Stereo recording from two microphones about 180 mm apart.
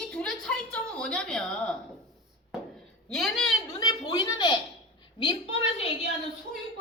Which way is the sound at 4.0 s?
25° left (ahead or behind).